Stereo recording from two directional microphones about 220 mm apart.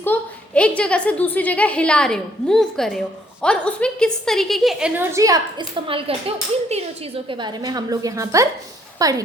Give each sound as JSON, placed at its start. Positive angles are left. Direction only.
{"t": 0.0, "sound": "a woman's voice", "side_deg": 5}